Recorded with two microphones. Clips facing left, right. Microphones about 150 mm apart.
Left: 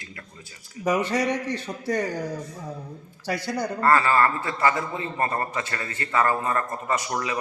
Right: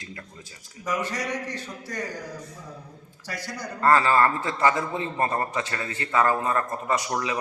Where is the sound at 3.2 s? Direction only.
65° left (ahead or behind).